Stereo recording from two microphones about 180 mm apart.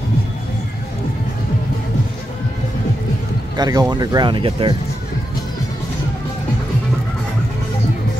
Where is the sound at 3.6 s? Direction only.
20° right (ahead or behind).